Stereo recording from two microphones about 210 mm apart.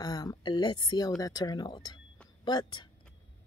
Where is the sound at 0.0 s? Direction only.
15° left (ahead or behind).